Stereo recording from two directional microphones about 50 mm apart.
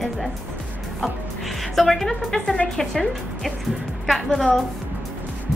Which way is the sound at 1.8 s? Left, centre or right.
Centre.